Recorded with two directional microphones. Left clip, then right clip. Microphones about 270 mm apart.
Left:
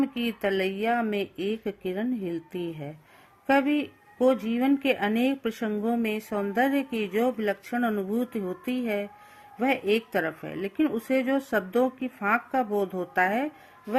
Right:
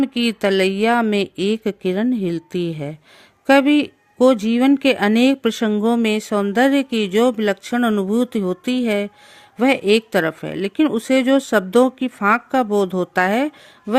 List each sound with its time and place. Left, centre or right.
0.0 s speech: right